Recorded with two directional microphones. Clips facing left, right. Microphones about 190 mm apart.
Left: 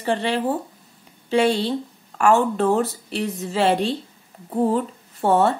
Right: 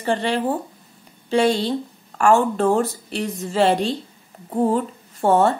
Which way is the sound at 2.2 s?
5° left (ahead or behind).